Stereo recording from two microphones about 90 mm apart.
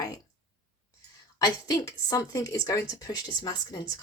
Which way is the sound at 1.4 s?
45° left (ahead or behind).